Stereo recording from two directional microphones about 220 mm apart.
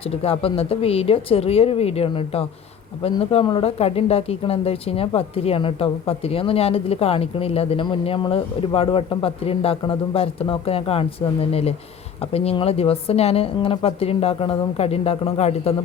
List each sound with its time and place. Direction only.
0.0 s speech: 25° left (ahead or behind)